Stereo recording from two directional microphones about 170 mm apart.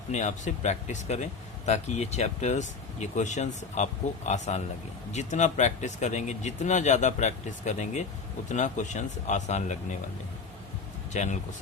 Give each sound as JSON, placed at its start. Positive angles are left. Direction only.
{"t": 0.1, "sound": "speech", "side_deg": 45}
{"t": 11.1, "sound": "speech", "side_deg": 45}